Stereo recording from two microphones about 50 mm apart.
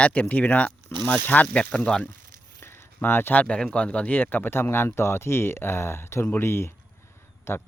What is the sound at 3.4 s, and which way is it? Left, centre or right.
Speech, left.